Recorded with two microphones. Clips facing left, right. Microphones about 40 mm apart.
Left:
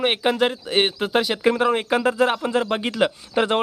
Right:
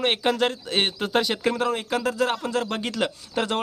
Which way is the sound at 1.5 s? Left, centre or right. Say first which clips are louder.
Left 5 dB; left.